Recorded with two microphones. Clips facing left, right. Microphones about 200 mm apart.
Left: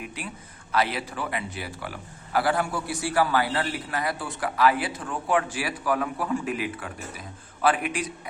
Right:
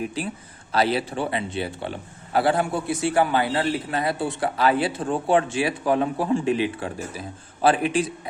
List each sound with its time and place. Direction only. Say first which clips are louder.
0.0 s a man's voice: right 8 dB; 30° right (ahead or behind)